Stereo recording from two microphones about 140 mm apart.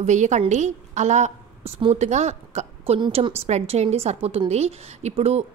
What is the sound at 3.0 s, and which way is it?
Speech, 40° right (ahead or behind).